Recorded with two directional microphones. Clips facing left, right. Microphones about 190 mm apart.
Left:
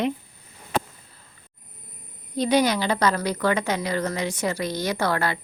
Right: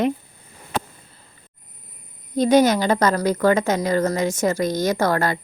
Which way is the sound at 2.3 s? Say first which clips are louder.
Right 5 dB; 45° right (ahead or behind).